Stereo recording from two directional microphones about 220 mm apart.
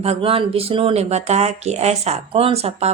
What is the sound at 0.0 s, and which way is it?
Speech, 25° right (ahead or behind).